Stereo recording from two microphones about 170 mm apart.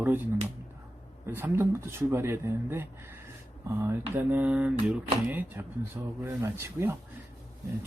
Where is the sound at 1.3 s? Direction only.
15° right (ahead or behind).